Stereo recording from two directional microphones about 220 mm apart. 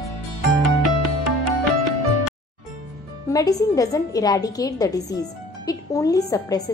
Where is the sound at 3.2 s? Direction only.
15° left (ahead or behind).